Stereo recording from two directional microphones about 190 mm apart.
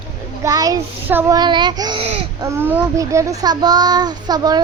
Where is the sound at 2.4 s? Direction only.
15° right (ahead or behind).